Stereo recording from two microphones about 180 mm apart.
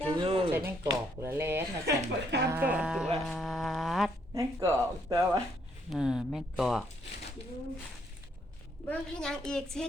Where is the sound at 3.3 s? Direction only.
Centre (ahead or behind).